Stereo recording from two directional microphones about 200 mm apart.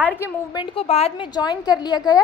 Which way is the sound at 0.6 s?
30° left (ahead or behind).